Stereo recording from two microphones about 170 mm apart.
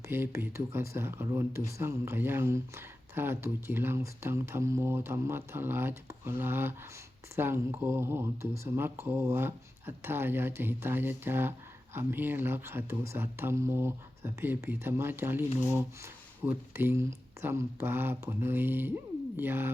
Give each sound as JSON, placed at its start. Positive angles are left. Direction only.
{"t": 0.1, "sound": "speech", "side_deg": -15}